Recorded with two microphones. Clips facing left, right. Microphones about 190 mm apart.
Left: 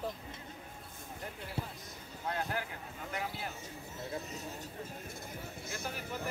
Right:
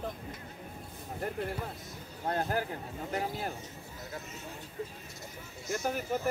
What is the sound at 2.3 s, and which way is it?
Speech, 40° right (ahead or behind).